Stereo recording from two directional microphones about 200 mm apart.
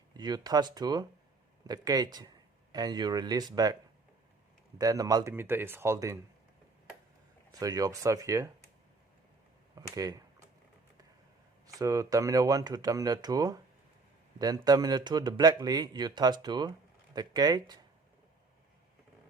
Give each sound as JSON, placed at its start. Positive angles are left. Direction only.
{"t": 0.1, "sound": "speech", "side_deg": -20}
{"t": 4.8, "sound": "speech", "side_deg": -20}
{"t": 7.6, "sound": "speech", "side_deg": -20}
{"t": 9.7, "sound": "speech", "side_deg": -20}
{"t": 11.6, "sound": "speech", "side_deg": -15}